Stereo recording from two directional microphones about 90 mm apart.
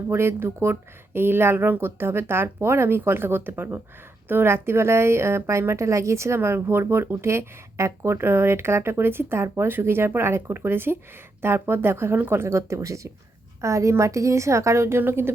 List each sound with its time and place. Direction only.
0.1 s a woman's voice: 30° right (ahead or behind)